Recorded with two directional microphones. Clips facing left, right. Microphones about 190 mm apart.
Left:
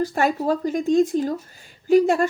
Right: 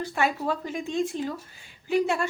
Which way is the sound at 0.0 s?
40° left (ahead or behind).